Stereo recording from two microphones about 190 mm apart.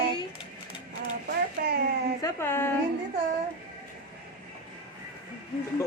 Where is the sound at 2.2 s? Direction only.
15° left (ahead or behind).